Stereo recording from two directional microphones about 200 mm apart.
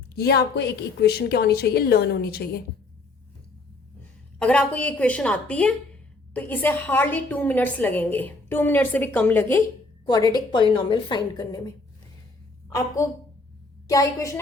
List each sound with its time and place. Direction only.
0.1 s a woman's voice: 55° left (ahead or behind)
4.4 s a woman's voice: 5° left (ahead or behind)